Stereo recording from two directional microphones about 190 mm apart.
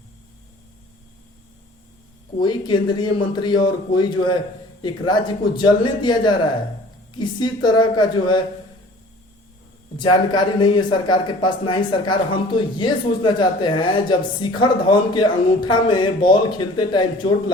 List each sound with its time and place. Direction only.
2.4 s speech: 25° left (ahead or behind)
10.0 s speech: 25° left (ahead or behind)